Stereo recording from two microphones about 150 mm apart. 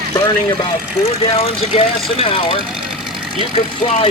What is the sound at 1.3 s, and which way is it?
Speech, 40° left (ahead or behind).